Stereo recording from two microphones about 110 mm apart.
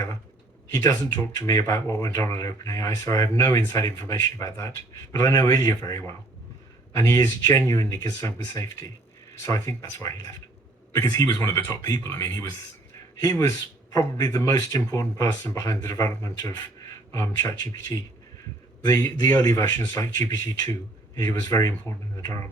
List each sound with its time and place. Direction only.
0.7 s a man's voice: 35° left (ahead or behind)